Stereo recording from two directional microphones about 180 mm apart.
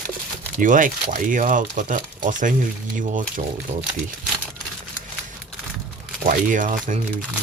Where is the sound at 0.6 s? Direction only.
45° right (ahead or behind).